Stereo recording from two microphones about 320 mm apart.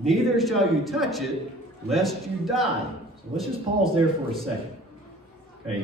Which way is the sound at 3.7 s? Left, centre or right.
Right.